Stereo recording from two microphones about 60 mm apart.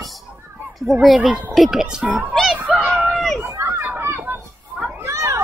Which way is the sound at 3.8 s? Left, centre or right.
Right.